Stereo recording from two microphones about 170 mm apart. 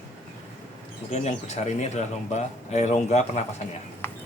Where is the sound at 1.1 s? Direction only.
40° left (ahead or behind).